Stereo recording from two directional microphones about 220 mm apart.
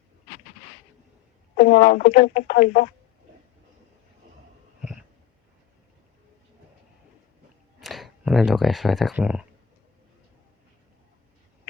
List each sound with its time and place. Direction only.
1.5 s speech: 40° left (ahead or behind)
7.8 s speech: centre (ahead or behind)